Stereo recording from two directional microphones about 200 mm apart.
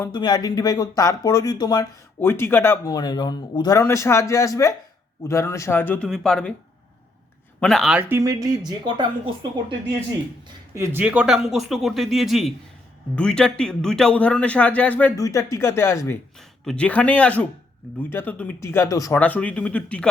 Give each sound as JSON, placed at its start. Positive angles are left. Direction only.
{"t": 0.0, "sound": "speech", "side_deg": 20}
{"t": 7.6, "sound": "speech", "side_deg": 0}
{"t": 10.8, "sound": "speech", "side_deg": -10}